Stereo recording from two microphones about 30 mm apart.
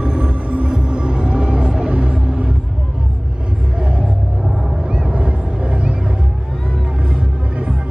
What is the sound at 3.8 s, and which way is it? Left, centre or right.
Music, right.